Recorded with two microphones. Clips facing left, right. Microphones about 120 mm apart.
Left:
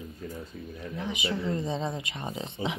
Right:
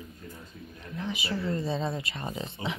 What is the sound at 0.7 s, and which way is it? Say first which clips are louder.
Speech: even; 15° left (ahead or behind).